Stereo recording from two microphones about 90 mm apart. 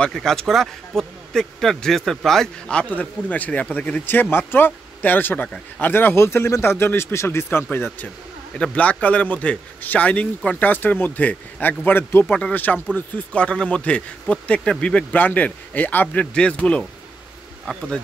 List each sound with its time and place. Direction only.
0.0 s a man's voice: 5° left (ahead or behind)